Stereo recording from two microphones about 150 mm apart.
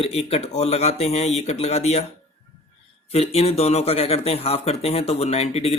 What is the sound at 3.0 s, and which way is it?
Speech, 40° left (ahead or behind).